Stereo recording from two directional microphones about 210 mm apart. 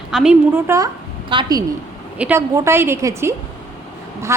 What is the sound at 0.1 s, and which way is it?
A woman's voice, 5° right (ahead or behind).